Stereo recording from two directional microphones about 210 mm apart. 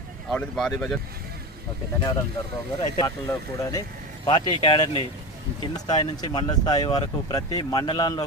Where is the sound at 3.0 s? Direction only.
15° left (ahead or behind).